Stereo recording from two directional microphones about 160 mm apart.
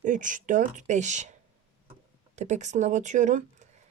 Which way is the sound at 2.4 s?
45° right (ahead or behind).